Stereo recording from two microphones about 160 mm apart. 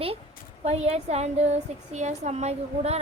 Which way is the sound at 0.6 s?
40° right (ahead or behind).